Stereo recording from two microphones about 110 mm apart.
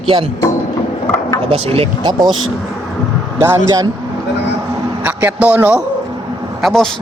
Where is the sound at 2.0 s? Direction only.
40° right (ahead or behind).